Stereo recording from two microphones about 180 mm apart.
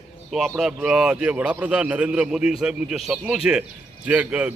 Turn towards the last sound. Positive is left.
turn(degrees=-10)  # may be behind; listen again after turning